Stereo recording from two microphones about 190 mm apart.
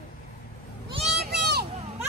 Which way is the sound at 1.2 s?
60° right (ahead or behind).